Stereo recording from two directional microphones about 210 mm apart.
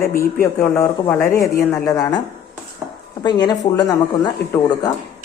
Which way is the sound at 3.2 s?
20° left (ahead or behind).